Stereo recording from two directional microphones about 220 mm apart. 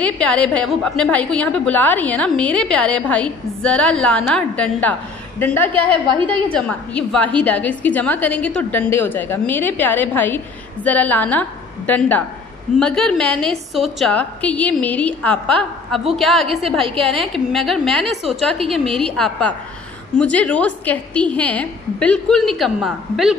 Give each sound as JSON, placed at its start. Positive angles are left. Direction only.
{"t": 0.0, "sound": "a woman's voice", "side_deg": 5}
{"t": 16.8, "sound": "a woman's voice", "side_deg": -25}
{"t": 17.1, "sound": "a woman's voice", "side_deg": 0}